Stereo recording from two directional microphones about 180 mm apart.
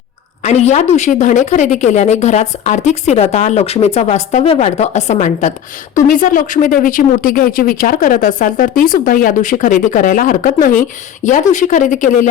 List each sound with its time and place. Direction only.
0.4 s speech: 40° left (ahead or behind)